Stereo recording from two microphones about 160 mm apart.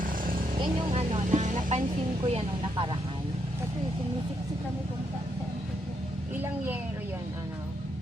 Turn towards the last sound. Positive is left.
turn(degrees=-10)  # may be behind; listen again after turning